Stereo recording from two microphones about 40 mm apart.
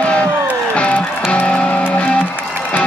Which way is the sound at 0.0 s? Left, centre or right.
Left.